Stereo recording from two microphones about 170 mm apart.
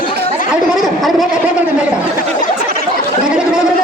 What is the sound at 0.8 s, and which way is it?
Speech, centre (ahead or behind).